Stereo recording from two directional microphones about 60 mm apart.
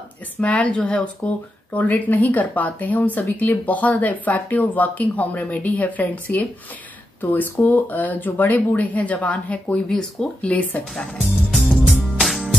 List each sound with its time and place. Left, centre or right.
0.4 s speech: left
9.8 s speech: centre
10.5 s speech: left
11.2 s music: centre